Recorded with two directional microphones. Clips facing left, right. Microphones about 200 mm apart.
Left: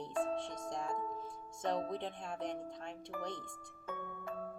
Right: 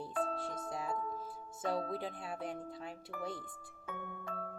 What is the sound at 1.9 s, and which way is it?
Speech, 5° right (ahead or behind).